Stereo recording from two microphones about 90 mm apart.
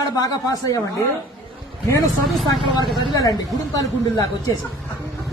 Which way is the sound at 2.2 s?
Centre (ahead or behind).